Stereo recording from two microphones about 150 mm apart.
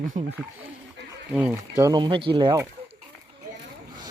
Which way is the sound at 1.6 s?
20° right (ahead or behind).